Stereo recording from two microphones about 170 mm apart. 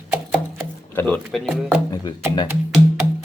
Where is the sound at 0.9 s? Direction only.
15° left (ahead or behind).